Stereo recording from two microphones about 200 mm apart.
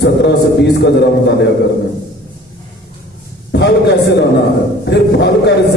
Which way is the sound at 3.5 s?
55° left (ahead or behind).